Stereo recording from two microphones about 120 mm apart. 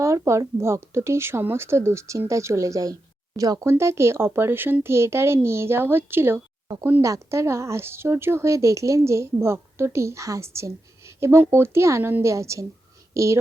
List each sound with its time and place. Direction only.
0.0 s speech: 25° right (ahead or behind)